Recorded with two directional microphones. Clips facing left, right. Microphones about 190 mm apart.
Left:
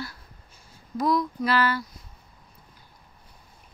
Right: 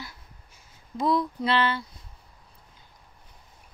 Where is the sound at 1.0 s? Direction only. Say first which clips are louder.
Left 1 dB; 30° right (ahead or behind).